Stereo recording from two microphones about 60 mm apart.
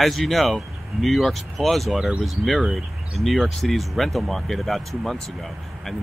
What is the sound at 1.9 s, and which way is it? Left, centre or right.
Speech, centre.